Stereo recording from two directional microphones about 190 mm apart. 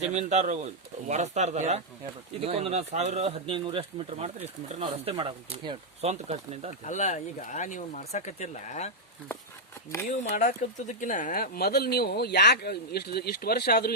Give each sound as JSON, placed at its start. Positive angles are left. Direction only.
{"t": 0.0, "sound": "speech", "side_deg": -35}
{"t": 6.8, "sound": "speech", "side_deg": 40}
{"t": 10.2, "sound": "speech", "side_deg": 40}